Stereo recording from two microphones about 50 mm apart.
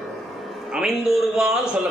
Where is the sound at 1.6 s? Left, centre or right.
Centre.